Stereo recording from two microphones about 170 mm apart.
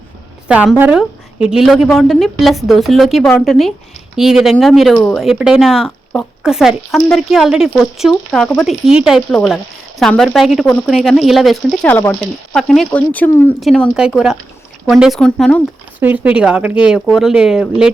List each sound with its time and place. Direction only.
0.4 s speech: 5° right (ahead or behind); by 12.1 s 10° left (ahead or behind)
12.5 s speech: centre (ahead or behind)
16.0 s speech: 10° right (ahead or behind)